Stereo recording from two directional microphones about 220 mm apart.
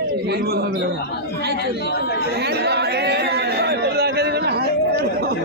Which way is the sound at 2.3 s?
50° right (ahead or behind).